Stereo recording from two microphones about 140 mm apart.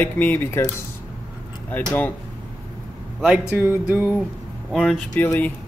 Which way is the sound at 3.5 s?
15° right (ahead or behind).